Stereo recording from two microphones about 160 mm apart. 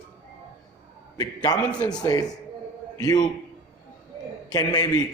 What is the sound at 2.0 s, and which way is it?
Speech, 25° left (ahead or behind).